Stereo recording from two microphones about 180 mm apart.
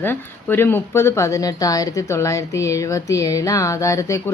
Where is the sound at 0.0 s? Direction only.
10° left (ahead or behind).